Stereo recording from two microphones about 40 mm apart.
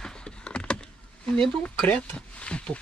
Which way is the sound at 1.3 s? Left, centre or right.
Centre.